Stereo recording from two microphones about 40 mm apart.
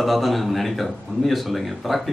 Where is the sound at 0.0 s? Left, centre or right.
Centre.